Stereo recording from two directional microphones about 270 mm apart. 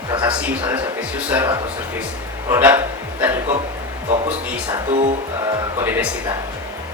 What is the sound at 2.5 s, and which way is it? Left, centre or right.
Speech, centre.